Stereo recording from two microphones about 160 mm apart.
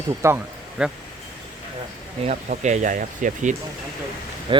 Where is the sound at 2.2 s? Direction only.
45° right (ahead or behind).